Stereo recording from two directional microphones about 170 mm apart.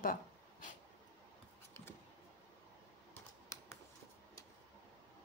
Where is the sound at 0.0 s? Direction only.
50° left (ahead or behind).